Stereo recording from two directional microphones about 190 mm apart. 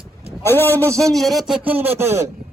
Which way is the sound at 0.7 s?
15° right (ahead or behind).